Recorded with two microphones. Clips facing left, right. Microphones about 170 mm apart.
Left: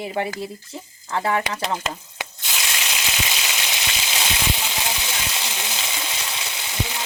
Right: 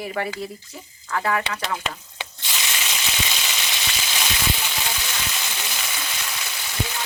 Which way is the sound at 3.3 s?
10° left (ahead or behind).